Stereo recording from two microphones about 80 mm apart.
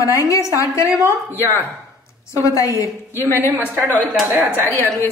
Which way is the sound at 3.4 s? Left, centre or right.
Right.